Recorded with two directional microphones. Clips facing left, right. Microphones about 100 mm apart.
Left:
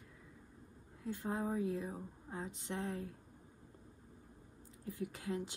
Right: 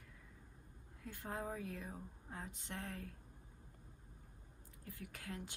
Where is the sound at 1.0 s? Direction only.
15° left (ahead or behind).